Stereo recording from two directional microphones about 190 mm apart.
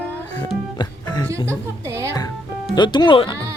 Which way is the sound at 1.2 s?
15° right (ahead or behind).